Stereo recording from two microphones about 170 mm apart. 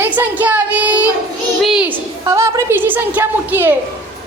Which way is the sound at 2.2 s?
15° right (ahead or behind).